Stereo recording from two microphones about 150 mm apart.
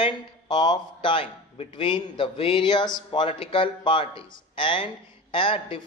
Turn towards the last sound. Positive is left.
turn(degrees=35)  # may be behind; listen again after turning